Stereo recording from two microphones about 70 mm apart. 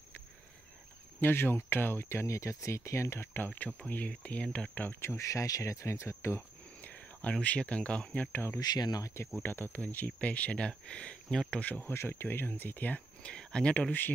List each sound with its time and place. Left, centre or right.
1.2 s speech: left
3.4 s speech: left
5.0 s speech: left
6.8 s speech: left
8.3 s speech: left
8.5 s speech: left
9.0 s speech: left; by 11.6 s centre
11.6 s speech: left
11.9 s speech: left